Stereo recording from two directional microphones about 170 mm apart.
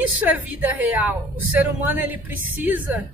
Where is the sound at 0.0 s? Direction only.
10° right (ahead or behind).